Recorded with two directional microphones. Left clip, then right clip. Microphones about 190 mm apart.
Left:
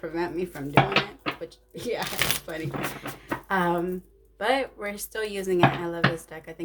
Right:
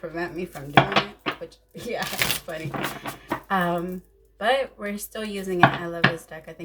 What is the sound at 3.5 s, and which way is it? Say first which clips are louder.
Speech: even; 45° left (ahead or behind).